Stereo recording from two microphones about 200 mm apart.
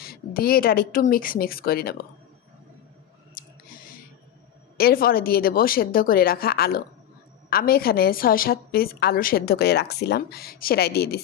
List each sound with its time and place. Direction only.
0.0 s a woman's voice: 50° left (ahead or behind)
3.3 s a sound: 45° left (ahead or behind)
4.8 s a woman's voice: 50° left (ahead or behind)